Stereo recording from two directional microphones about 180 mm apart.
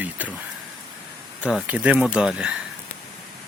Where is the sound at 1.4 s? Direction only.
5° right (ahead or behind).